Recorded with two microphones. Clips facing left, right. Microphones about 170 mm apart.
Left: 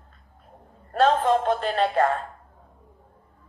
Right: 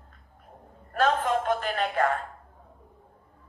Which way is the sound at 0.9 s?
30° left (ahead or behind).